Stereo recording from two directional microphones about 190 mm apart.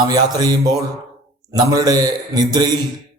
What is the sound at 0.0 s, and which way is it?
A man's voice, 20° right (ahead or behind).